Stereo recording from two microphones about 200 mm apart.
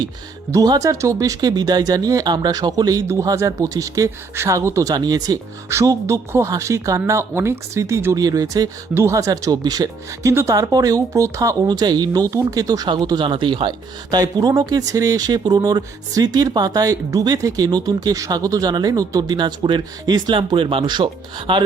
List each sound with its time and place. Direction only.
0.5 s speech: 15° right (ahead or behind)